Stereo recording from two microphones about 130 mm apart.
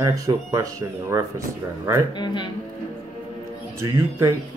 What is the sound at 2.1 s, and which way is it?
Speech, 35° left (ahead or behind).